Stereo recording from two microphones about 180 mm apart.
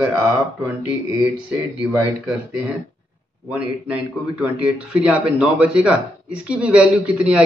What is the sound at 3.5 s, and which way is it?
A man's voice, 10° right (ahead or behind).